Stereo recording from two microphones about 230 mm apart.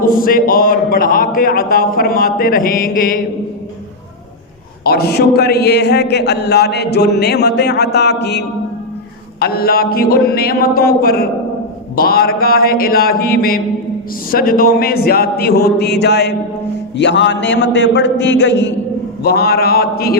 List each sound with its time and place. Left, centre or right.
0.0 s a man's voice: left
4.8 s a man's voice: left